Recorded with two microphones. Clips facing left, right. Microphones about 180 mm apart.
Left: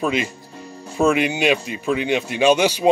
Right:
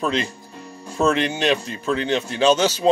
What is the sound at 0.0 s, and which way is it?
Speech, 10° left (ahead or behind).